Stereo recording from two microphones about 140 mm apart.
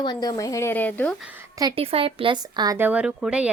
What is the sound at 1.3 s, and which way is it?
Speech, 25° right (ahead or behind).